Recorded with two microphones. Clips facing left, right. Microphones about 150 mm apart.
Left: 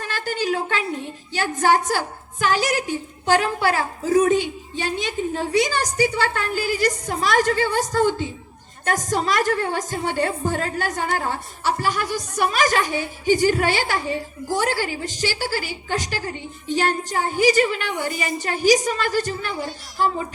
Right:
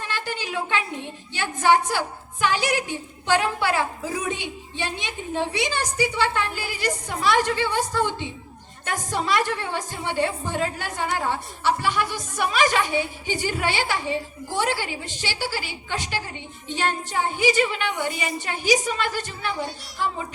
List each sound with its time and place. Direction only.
0.1 s a woman's voice: 45° left (ahead or behind)